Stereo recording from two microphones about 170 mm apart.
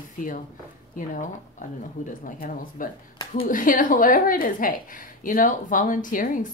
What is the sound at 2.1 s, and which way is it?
A woman's voice, 50° left (ahead or behind).